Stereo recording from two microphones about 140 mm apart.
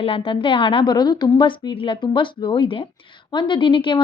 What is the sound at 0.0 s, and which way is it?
A woman's voice, 40° left (ahead or behind).